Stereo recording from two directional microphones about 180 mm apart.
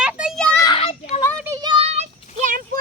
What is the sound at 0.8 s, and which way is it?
Children playing, 35° left (ahead or behind).